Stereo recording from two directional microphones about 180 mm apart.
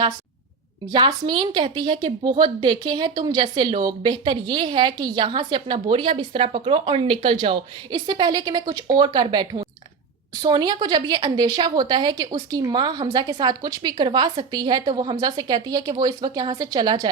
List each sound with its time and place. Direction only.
0.9 s speech: 25° right (ahead or behind)